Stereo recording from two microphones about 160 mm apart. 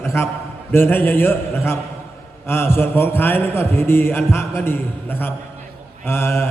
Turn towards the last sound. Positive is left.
turn(degrees=15)  # may be behind; listen again after turning